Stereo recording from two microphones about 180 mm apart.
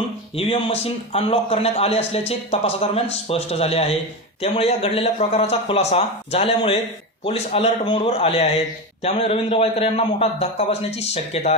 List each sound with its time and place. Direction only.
0.4 s a man's voice: 35° left (ahead or behind)